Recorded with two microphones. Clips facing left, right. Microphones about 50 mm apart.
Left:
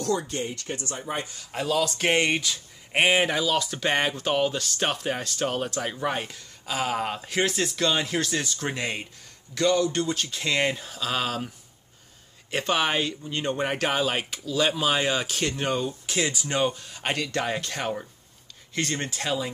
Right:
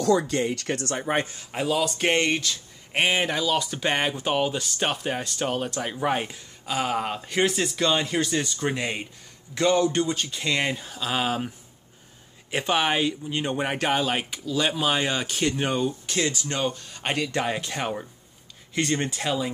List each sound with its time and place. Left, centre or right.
0.2 s speech: right
1.0 s a man's voice: right
1.5 s speech: centre
2.1 s speech: centre
6.6 s speech: centre
9.5 s speech: right
10.0 s speech: centre